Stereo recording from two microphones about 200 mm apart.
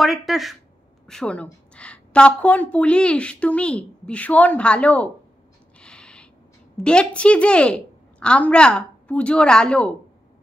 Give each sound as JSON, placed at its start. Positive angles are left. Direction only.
{"t": 0.0, "sound": "a woman's voice", "side_deg": 0}
{"t": 5.8, "sound": "a sound", "side_deg": 5}
{"t": 6.8, "sound": "a woman's voice", "side_deg": 5}